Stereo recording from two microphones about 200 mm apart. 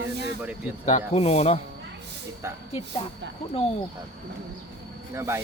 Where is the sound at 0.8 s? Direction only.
30° left (ahead or behind).